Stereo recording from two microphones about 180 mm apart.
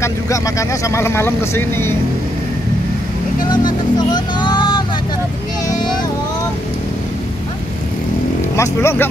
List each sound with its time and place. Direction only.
0.0 s speech: 15° left (ahead or behind)
3.5 s music: 25° left (ahead or behind)
8.5 s speech: 15° left (ahead or behind)